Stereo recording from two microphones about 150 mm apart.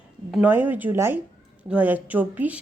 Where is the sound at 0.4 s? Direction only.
15° right (ahead or behind).